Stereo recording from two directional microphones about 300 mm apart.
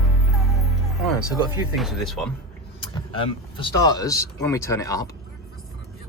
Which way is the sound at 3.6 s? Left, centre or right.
Centre.